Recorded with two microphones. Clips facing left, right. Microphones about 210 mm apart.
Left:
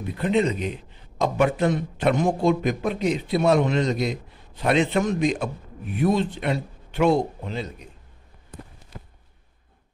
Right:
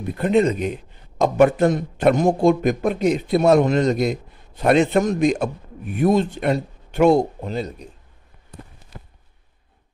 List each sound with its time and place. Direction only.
0.1 s a man's voice: 45° right (ahead or behind)